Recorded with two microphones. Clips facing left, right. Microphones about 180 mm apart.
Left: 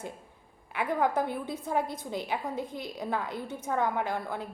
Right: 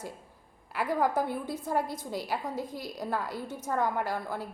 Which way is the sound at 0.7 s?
Centre (ahead or behind).